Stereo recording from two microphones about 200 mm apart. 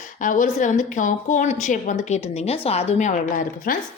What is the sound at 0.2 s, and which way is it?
A woman's voice, 40° left (ahead or behind).